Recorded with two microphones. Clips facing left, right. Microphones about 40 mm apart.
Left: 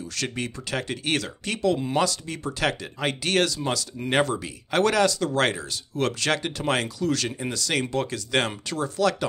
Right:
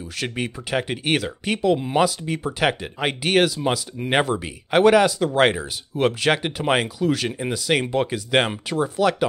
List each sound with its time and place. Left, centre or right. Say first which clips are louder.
0.1 s speech: right 4 dB; centre